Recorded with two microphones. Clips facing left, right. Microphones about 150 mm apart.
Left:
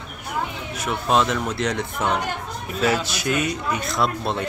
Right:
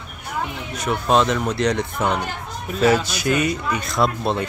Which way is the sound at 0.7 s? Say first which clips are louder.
Right 2 dB; centre (ahead or behind).